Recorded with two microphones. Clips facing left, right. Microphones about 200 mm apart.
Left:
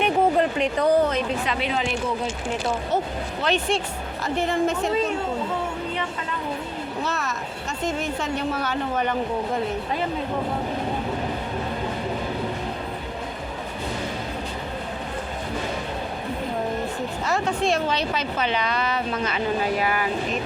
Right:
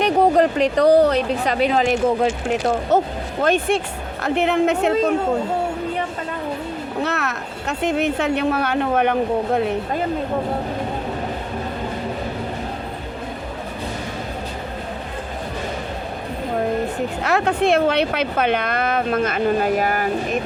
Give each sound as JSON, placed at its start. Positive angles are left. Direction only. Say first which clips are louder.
{"t": 0.0, "sound": "a woman's voice", "louder": "right 4 dB", "side_deg": -40}
{"t": 3.4, "sound": "speech", "louder": "right 5 dB", "side_deg": -50}
{"t": 4.2, "sound": "speech", "louder": "right 5 dB", "side_deg": -65}
{"t": 7.0, "sound": "speech", "louder": "right 5 dB", "side_deg": -65}
{"t": 17.2, "sound": "speech", "louder": "right 5 dB", "side_deg": -65}